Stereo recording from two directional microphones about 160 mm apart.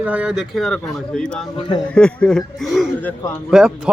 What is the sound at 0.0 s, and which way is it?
Speech, 10° right (ahead or behind).